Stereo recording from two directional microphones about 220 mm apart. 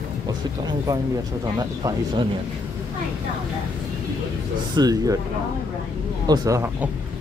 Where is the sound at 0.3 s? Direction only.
20° right (ahead or behind).